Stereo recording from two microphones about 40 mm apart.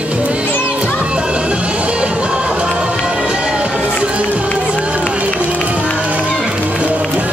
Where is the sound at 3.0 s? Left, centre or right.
Right.